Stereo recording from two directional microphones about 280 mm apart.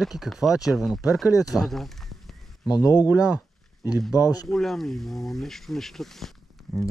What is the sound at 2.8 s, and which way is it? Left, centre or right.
Speech, centre.